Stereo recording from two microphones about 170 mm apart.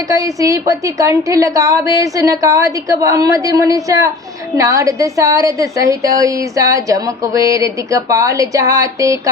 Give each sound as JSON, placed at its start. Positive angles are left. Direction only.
{"t": 0.1, "sound": "a woman's voice", "side_deg": -20}